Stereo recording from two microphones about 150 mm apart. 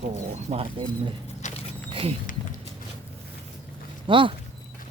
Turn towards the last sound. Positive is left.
turn(degrees=-35)  # may be behind; listen again after turning